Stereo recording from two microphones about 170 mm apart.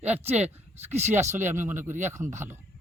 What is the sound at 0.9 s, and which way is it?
Speech, 40° right (ahead or behind).